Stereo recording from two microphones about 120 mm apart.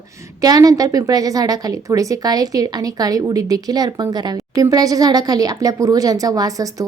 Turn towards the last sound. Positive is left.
turn(degrees=-30)  # may be behind; listen again after turning